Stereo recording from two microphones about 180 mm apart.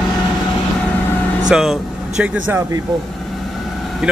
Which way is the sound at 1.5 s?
Centre (ahead or behind).